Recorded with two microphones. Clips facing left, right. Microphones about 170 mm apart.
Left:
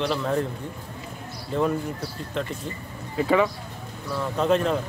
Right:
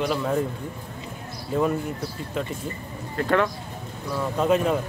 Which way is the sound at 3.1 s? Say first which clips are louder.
Left 1 dB; 5° left (ahead or behind).